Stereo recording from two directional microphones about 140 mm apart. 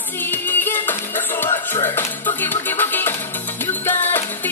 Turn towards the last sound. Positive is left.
turn(degrees=15)  # may be behind; listen again after turning